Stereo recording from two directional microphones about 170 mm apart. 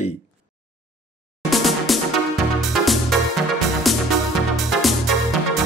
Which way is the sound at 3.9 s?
Centre (ahead or behind).